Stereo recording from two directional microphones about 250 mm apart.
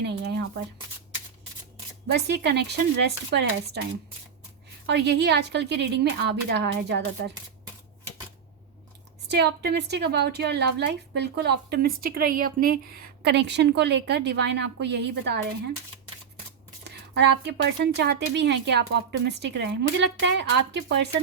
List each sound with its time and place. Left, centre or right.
0.0 s a sound: right
2.0 s a woman's voice: right
4.9 s speech: right
9.3 s a woman's voice: right
16.8 s speech: right